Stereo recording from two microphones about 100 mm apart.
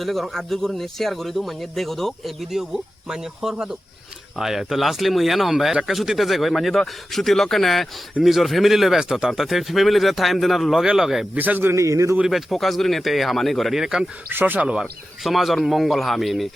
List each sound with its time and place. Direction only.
0.0 s speech: centre (ahead or behind)
11.3 s a man's voice: 20° right (ahead or behind)
11.7 s a man's voice: 30° right (ahead or behind)
12.1 s speech: 5° right (ahead or behind)
14.3 s speech: 20° right (ahead or behind)
15.2 s speech: centre (ahead or behind)